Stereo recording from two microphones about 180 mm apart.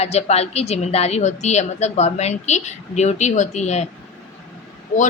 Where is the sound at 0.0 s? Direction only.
40° left (ahead or behind).